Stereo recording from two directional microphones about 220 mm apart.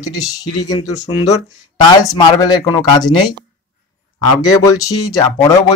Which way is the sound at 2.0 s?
15° left (ahead or behind).